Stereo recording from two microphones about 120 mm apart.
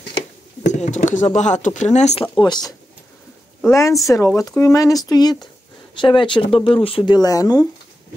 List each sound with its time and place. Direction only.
0.7 s speech: 90° left
1.3 s speech: 80° left
2.3 s speech: 35° left (ahead or behind)
3.6 s a woman's voice: 25° left (ahead or behind); by 7.0 s 50° left (ahead or behind)
7.1 s speech: 30° left (ahead or behind)